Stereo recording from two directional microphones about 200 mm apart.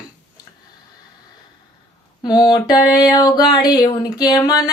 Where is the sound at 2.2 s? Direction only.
20° left (ahead or behind).